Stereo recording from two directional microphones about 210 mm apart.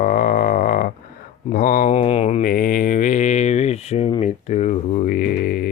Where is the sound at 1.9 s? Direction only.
25° left (ahead or behind).